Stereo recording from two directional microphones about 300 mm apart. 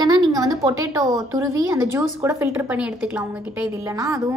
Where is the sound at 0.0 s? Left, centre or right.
Centre.